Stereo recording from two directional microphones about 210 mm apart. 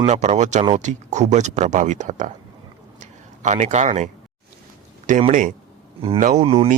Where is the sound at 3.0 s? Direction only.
35° right (ahead or behind).